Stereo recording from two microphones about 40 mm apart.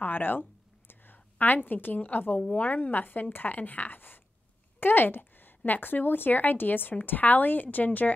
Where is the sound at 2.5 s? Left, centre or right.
Left.